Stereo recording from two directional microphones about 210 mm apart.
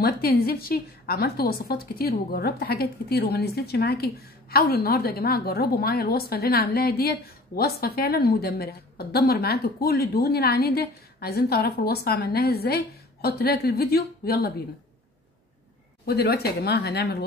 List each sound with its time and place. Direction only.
0.0 s a woman's voice: 45° left (ahead or behind)
16.1 s a woman's voice: 50° left (ahead or behind)